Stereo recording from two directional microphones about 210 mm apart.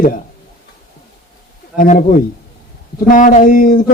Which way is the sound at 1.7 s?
40° left (ahead or behind).